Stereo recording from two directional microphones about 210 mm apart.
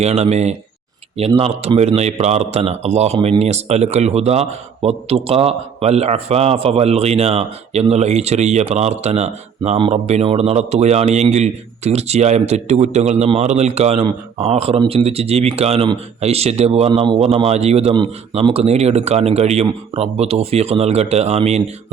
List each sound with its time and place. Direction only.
0.0 s a man's voice: 30° right (ahead or behind)